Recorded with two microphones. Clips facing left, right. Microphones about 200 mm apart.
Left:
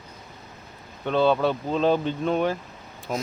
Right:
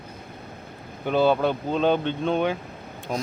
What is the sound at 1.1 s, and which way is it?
Speech, 5° right (ahead or behind).